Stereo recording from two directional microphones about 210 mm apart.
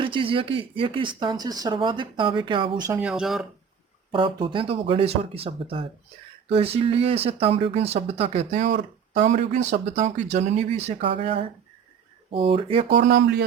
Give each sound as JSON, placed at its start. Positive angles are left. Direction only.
{"t": 0.0, "sound": "speech", "side_deg": -25}
{"t": 3.0, "sound": "speech", "side_deg": -5}
{"t": 4.1, "sound": "speech", "side_deg": -25}
{"t": 13.1, "sound": "a man's voice", "side_deg": -55}